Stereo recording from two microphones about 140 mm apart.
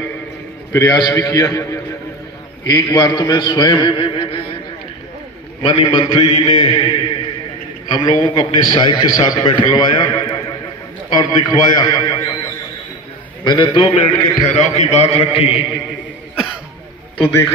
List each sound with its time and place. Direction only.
0.7 s a man's voice: 25° left (ahead or behind)
5.6 s a man's voice: 40° left (ahead or behind)
6.1 s mantra: 40° left (ahead or behind)
7.9 s a man's voice: 30° left (ahead or behind)
14.5 s a man's voice: 55° left (ahead or behind)